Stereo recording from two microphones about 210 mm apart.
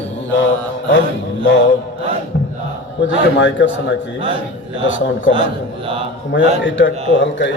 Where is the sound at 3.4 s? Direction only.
60° left (ahead or behind).